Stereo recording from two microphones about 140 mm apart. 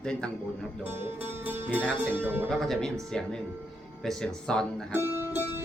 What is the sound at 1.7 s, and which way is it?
Speech, 10° left (ahead or behind).